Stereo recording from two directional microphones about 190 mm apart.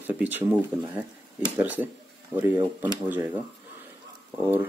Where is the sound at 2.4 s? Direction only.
10° right (ahead or behind).